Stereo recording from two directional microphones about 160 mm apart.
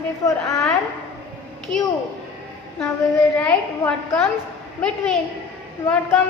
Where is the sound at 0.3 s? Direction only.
20° left (ahead or behind).